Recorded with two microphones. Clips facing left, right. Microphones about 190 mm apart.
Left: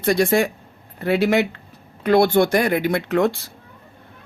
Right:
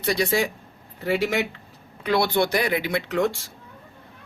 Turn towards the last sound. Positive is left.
turn(degrees=60)  # may be behind; listen again after turning